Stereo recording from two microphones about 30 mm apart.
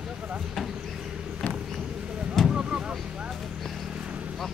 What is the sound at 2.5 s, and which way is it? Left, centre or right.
Vehicle, right.